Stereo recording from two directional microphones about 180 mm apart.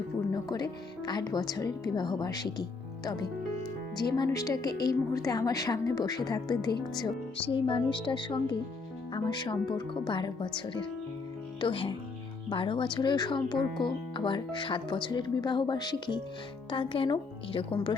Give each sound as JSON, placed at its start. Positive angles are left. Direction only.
{"t": 0.4, "sound": "a woman's voice", "side_deg": 25}